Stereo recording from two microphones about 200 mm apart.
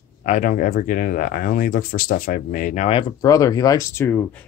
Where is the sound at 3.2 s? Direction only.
15° left (ahead or behind).